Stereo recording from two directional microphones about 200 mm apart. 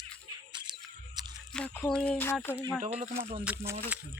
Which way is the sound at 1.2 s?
20° right (ahead or behind).